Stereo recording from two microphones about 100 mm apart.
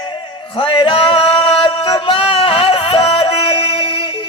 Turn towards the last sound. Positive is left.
turn(degrees=65)  # may be behind; listen again after turning